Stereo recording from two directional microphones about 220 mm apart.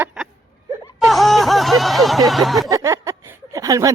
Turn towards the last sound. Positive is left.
turn(degrees=-15)  # may be behind; listen again after turning